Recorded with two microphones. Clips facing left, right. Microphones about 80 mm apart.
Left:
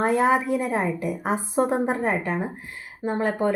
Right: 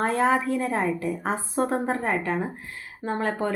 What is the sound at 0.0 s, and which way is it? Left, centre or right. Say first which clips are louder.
A woman's voice: left 2 dB; centre.